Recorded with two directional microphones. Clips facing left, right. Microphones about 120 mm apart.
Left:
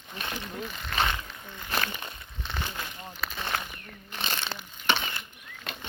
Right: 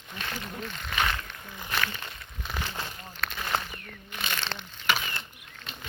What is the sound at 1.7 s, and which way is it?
Speech, 30° left (ahead or behind).